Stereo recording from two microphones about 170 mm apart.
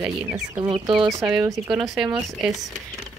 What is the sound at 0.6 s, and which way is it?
Speech, 25° right (ahead or behind).